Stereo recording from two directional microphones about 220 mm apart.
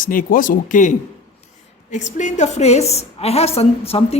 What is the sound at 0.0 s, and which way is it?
Speech, 40° left (ahead or behind).